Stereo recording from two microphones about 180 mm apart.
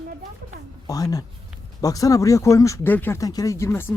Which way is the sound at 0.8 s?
20° left (ahead or behind).